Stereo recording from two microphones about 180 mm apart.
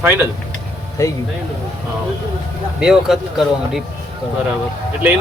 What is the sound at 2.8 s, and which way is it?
Speech, 5° right (ahead or behind).